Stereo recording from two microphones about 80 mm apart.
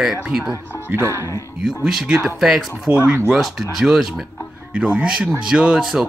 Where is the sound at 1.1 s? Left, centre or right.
Left.